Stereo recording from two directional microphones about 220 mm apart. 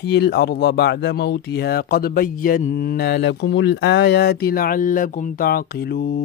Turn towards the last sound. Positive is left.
turn(degrees=45)  # may be behind; listen again after turning